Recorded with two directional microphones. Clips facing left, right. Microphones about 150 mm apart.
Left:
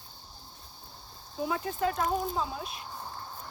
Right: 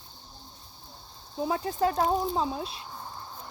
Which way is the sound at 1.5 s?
35° right (ahead or behind).